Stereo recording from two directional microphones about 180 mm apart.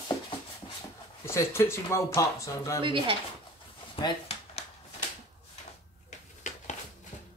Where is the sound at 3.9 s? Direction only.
30° left (ahead or behind).